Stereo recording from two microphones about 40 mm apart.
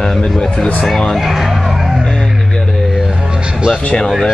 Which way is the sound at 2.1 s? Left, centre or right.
Centre.